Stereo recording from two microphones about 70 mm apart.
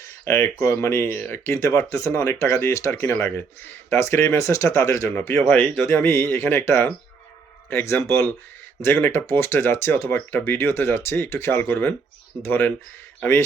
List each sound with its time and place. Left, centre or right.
0.3 s speech: left
1.5 s speech: left
5.1 s speech: left
5.4 s speech: centre
5.8 s speech: left